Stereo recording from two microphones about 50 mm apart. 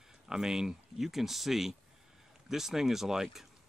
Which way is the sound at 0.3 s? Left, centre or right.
Centre.